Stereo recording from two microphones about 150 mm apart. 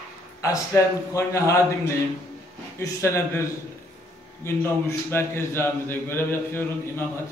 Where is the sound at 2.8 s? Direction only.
20° left (ahead or behind).